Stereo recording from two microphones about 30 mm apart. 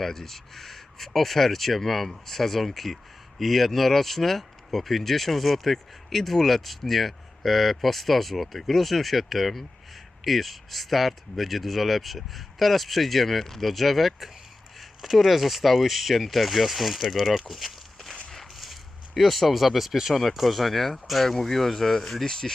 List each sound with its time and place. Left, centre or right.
0.0 s speech: centre
17.5 s walk: centre
18.5 s a sound: centre
20.1 s speech: centre